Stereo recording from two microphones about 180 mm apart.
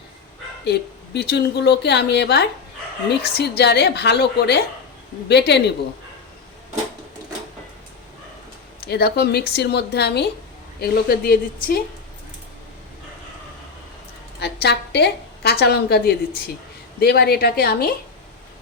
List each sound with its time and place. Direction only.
0.6 s a woman's voice: 70° left (ahead or behind)
8.9 s a woman's voice: 60° left (ahead or behind)
14.3 s a woman's voice: 65° left (ahead or behind)